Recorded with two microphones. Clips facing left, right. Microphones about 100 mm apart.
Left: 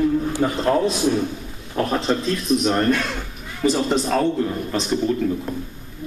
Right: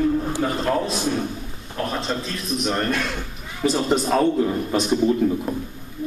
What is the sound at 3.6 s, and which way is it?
A man's voice, 5° right (ahead or behind).